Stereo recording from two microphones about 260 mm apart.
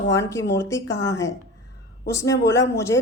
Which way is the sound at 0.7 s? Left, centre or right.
Centre.